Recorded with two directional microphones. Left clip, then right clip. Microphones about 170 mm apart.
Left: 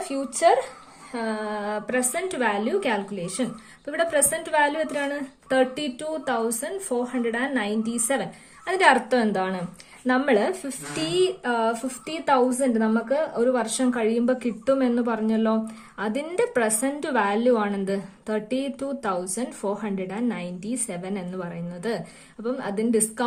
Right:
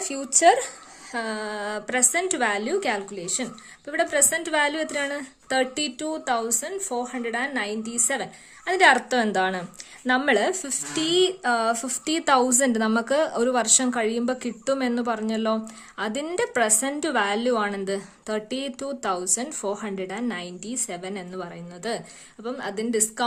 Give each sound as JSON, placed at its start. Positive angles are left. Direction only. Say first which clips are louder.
{"t": 0.1, "sound": "a woman's voice", "louder": "right 2 dB", "side_deg": -35}